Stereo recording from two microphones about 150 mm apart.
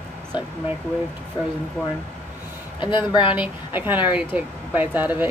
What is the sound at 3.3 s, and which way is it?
A woman's voice, 10° right (ahead or behind).